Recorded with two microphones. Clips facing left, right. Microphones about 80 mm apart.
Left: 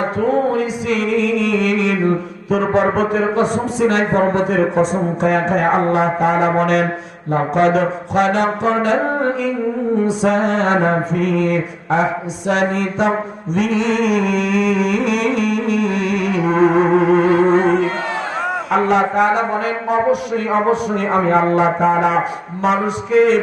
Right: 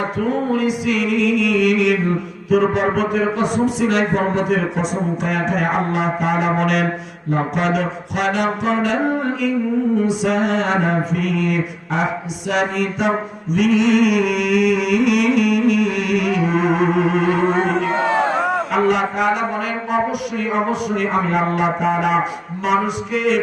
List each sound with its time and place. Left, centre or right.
0.2 s music: left
2.5 s mantra: left
10.1 s mantra: left
18.0 s a sound: centre
18.9 s mantra: left